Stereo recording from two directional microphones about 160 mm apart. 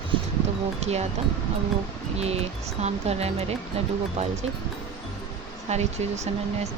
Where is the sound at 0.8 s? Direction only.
45° right (ahead or behind).